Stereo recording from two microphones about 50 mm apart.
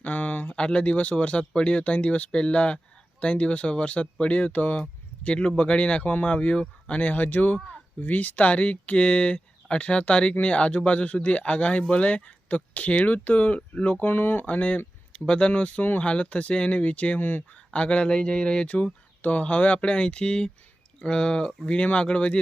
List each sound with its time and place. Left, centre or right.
0.0 s a sound: left
0.5 s speech: left
17.2 s speech: left
17.5 s speech: left